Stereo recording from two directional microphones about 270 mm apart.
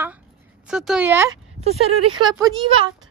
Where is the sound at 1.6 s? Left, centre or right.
Right.